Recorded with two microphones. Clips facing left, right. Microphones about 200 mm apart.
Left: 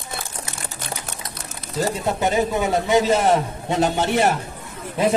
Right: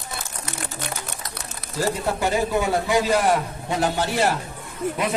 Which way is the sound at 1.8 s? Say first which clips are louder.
Left 1 dB; 20° left (ahead or behind).